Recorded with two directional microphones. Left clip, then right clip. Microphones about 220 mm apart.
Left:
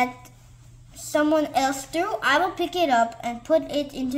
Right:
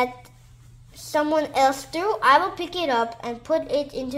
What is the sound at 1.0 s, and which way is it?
A woman's voice, 20° right (ahead or behind).